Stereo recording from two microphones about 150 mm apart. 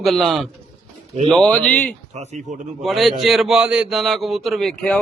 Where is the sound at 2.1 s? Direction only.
50° right (ahead or behind).